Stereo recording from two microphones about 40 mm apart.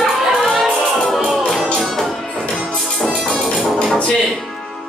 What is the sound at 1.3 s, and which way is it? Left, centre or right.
Music, centre.